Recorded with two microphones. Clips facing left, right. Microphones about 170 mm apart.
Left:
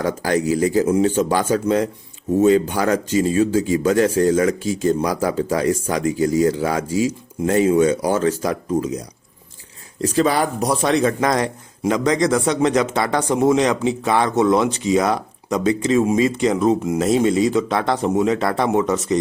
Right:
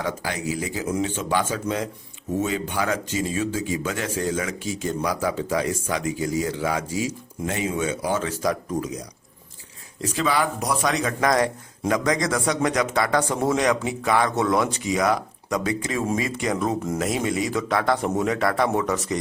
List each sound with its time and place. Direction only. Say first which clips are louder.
0.0 s speech: left 8 dB; 40° left (ahead or behind)
8.4 s speech: left 4 dB; 30° left (ahead or behind)
10.0 s speech: left 6 dB; 40° left (ahead or behind); by 19.2 s 25° left (ahead or behind)